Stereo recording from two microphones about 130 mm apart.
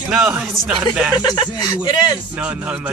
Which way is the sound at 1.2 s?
35° left (ahead or behind).